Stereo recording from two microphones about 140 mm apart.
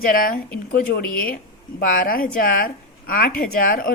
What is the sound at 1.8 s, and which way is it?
A woman's voice, 90° left.